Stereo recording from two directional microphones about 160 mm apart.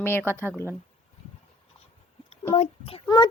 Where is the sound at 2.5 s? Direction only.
35° left (ahead or behind).